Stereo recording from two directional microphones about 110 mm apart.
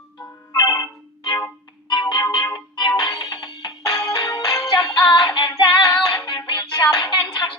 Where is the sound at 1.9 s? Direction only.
40° left (ahead or behind).